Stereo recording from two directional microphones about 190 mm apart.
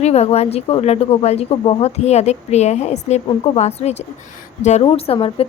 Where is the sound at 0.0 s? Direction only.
35° left (ahead or behind).